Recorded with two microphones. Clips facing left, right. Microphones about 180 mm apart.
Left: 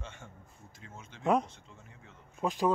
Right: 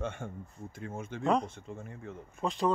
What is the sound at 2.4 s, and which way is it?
Speech, 5° left (ahead or behind).